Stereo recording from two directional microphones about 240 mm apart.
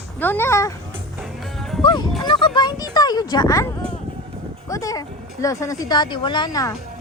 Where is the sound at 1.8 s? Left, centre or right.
Centre.